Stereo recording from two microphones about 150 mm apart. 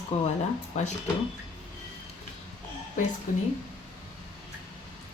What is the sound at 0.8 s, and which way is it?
Speech, 50° left (ahead or behind).